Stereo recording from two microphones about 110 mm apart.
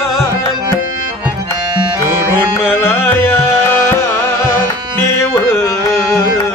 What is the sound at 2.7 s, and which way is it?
Music, 20° left (ahead or behind).